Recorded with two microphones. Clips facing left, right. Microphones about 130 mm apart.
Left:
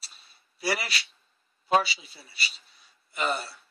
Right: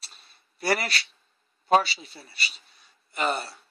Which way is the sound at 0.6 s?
50° right (ahead or behind).